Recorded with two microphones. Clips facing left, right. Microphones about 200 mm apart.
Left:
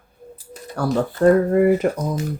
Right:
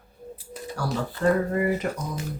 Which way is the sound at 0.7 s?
55° left (ahead or behind).